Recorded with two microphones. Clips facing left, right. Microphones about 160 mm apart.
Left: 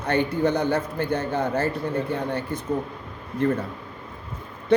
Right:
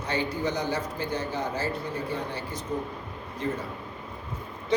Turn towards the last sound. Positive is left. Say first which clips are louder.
# left 8 dB
turn(degrees=55)  # may be behind; listen again after turning